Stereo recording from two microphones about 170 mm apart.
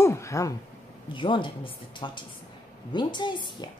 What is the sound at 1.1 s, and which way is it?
A woman's voice, 30° left (ahead or behind).